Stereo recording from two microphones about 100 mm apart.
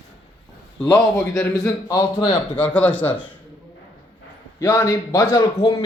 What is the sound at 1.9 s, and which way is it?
Speech, 35° left (ahead or behind).